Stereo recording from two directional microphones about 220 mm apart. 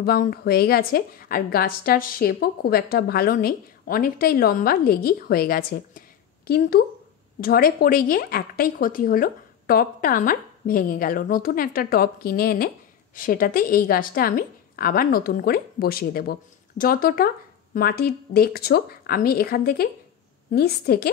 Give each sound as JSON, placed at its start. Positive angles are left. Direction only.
{"t": 0.0, "sound": "a woman's voice", "side_deg": 45}